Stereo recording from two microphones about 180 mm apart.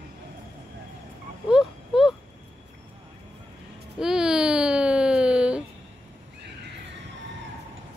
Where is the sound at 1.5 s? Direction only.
Centre (ahead or behind).